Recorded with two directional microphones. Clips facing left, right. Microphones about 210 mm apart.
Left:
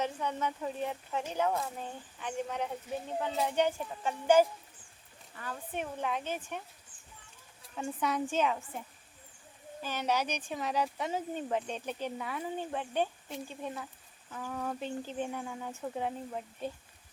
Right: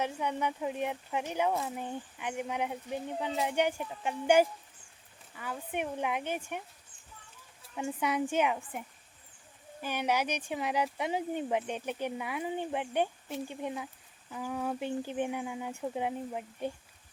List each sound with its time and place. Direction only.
0.0 s speech: 10° right (ahead or behind)
7.8 s speech: 10° right (ahead or behind)
9.8 s speech: 10° right (ahead or behind)